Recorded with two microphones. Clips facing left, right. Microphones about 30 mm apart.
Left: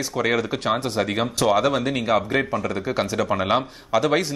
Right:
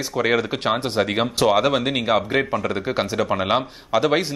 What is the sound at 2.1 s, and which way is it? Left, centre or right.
Speech, centre.